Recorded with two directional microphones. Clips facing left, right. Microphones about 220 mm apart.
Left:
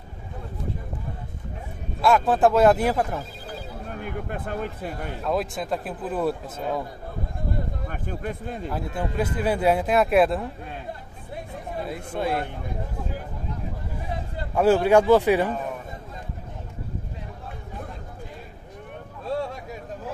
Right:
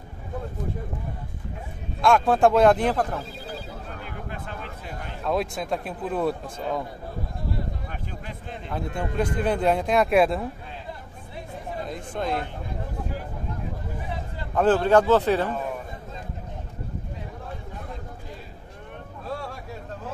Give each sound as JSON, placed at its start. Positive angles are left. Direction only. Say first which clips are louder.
{"t": 2.0, "sound": "speech", "louder": "even", "side_deg": 5}
{"t": 3.5, "sound": "a sound", "louder": "left 2 dB", "side_deg": 55}
{"t": 5.2, "sound": "speech", "louder": "right 1 dB", "side_deg": 0}
{"t": 7.9, "sound": "speech", "louder": "left 6 dB", "side_deg": 50}
{"t": 8.6, "sound": "speech", "louder": "even", "side_deg": 5}
{"t": 11.8, "sound": "a man's voice", "louder": "left 2 dB", "side_deg": 5}
{"t": 14.5, "sound": "a man's voice", "louder": "left 1 dB", "side_deg": 10}